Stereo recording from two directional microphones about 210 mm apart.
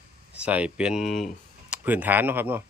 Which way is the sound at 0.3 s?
5° right (ahead or behind).